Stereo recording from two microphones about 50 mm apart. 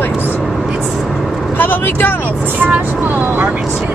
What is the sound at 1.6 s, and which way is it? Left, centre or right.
Vehicle, left.